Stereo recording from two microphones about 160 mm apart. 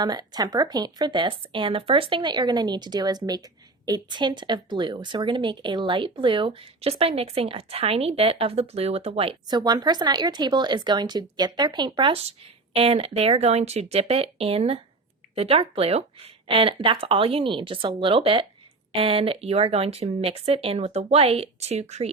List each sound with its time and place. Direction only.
0.0 s a woman's voice: 25° right (ahead or behind)
9.5 s a woman's voice: 25° right (ahead or behind); by 22.1 s 45° right (ahead or behind)